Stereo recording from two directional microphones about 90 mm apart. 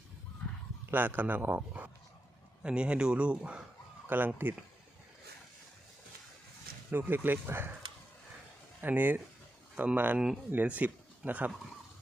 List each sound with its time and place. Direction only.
0.9 s a man's voice: 20° right (ahead or behind)
6.9 s a man's voice: 20° right (ahead or behind)
8.8 s a man's voice: 20° right (ahead or behind)